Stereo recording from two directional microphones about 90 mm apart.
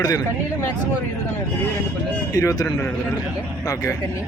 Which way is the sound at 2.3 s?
40° left (ahead or behind).